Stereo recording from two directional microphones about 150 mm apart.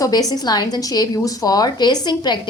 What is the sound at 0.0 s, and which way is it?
A woman's voice, 25° left (ahead or behind).